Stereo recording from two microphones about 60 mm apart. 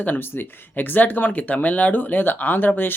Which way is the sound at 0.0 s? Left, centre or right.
Left.